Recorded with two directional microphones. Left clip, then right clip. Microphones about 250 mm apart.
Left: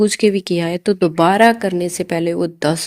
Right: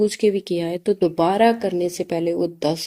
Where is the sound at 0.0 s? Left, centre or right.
Left.